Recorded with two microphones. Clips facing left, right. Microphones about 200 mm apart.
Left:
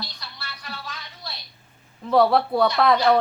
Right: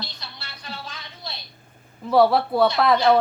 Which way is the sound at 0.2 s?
25° right (ahead or behind).